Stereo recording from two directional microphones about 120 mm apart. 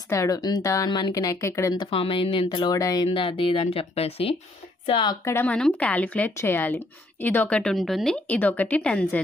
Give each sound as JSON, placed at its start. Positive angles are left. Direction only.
{"t": 0.1, "sound": "speech", "side_deg": 25}
{"t": 1.8, "sound": "speech", "side_deg": 50}
{"t": 3.1, "sound": "speech", "side_deg": 50}
{"t": 4.8, "sound": "a woman's voice", "side_deg": 45}
{"t": 5.2, "sound": "speech", "side_deg": 20}